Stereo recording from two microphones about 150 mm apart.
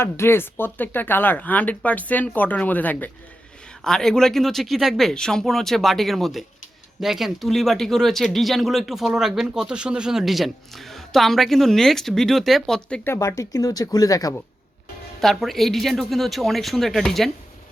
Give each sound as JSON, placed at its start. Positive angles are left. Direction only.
{"t": 0.0, "sound": "speech", "side_deg": 15}
{"t": 13.1, "sound": "speech", "side_deg": 20}
{"t": 15.2, "sound": "speech", "side_deg": 0}